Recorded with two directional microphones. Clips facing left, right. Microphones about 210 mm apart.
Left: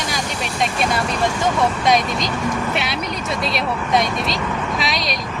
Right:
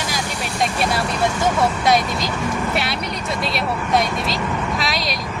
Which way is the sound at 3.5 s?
Centre (ahead or behind).